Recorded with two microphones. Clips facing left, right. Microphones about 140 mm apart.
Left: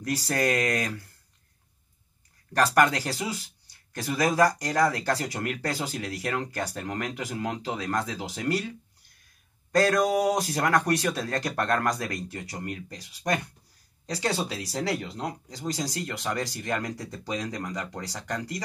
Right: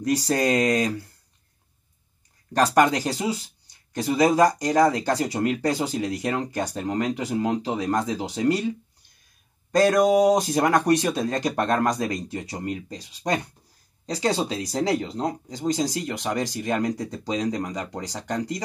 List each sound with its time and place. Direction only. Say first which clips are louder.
0.0 s speech: right 5 dB; 20° right (ahead or behind)
2.5 s speech: right 3 dB; 20° right (ahead or behind)